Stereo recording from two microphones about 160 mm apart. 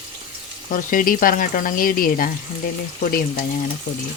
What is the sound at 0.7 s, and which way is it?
Speech, 60° left (ahead or behind).